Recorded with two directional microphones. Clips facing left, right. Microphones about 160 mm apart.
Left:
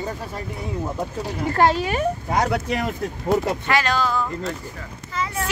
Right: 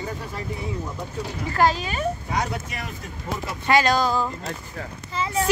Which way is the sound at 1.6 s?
65° left (ahead or behind).